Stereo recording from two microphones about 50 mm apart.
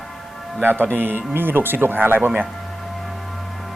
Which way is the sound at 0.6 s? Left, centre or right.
Right.